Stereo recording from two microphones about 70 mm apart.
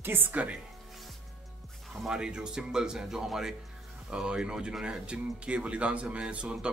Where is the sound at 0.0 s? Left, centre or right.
Right.